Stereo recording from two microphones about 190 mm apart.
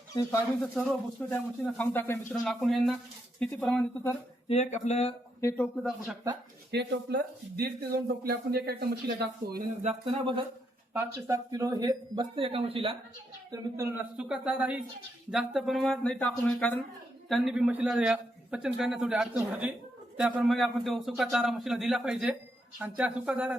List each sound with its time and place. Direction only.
0.2 s a man's voice: 15° left (ahead or behind)
4.4 s speech: 35° left (ahead or behind)
5.4 s speech: 10° left (ahead or behind)
6.7 s speech: 60° right (ahead or behind)
9.8 s speech: 30° right (ahead or behind)
10.9 s speech: 15° right (ahead or behind)
13.5 s a man's voice: 15° right (ahead or behind)